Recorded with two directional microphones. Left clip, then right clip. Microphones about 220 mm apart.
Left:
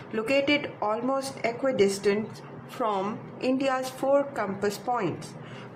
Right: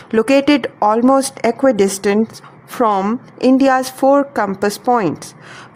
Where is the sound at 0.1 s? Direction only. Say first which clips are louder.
Right 12 dB; 50° right (ahead or behind).